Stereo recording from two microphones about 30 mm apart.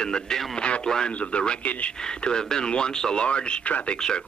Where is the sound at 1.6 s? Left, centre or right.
Left.